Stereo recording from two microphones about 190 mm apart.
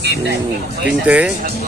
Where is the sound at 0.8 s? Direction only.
5° right (ahead or behind).